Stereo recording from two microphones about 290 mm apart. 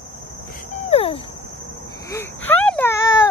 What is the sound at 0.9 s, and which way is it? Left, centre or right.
Cricket, centre.